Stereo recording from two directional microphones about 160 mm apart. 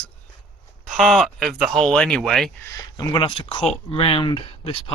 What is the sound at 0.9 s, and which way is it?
Speech, centre (ahead or behind).